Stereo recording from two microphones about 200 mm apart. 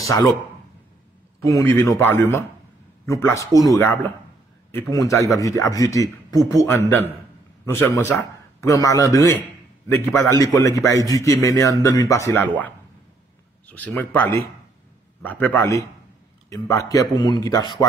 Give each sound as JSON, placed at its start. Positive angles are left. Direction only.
{"t": 0.0, "sound": "speech", "side_deg": 15}
{"t": 1.4, "sound": "speech", "side_deg": 15}